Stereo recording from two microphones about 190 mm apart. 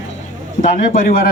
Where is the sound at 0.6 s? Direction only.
45° left (ahead or behind).